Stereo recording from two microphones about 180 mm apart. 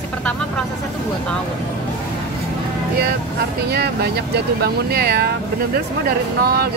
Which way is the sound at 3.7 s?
60° right (ahead or behind).